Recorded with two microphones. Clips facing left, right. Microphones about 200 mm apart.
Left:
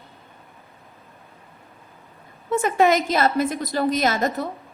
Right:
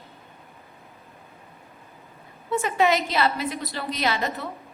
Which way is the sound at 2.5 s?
50° left (ahead or behind).